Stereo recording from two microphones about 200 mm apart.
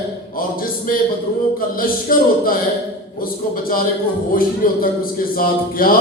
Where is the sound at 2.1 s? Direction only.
45° left (ahead or behind).